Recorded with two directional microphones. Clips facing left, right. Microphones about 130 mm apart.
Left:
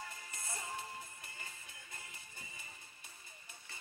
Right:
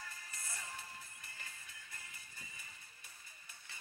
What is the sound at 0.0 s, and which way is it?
Music, 25° left (ahead or behind).